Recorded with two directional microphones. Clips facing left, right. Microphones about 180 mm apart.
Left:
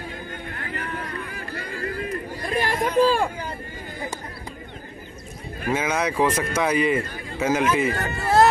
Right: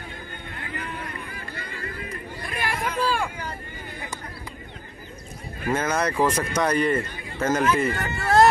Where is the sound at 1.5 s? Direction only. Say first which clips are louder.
Left 7 dB; 40° left (ahead or behind).